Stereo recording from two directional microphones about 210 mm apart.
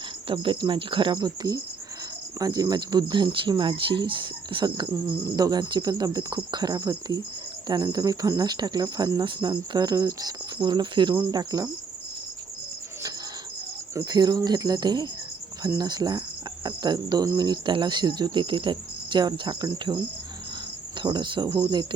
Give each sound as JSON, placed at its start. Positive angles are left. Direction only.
{"t": 0.3, "sound": "speech", "side_deg": -25}
{"t": 13.9, "sound": "speech", "side_deg": -20}
{"t": 21.0, "sound": "speech", "side_deg": -20}